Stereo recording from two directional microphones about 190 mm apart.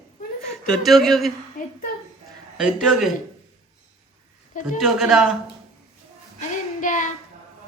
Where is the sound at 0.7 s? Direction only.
Centre (ahead or behind).